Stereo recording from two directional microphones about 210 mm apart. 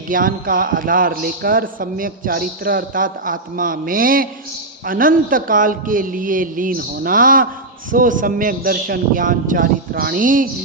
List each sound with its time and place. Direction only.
0.1 s a man's voice: 40° right (ahead or behind)